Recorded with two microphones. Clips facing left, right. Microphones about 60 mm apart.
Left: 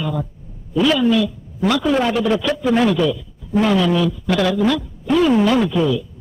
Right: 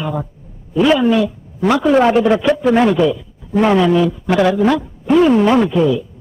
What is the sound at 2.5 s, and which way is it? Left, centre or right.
Speech, centre.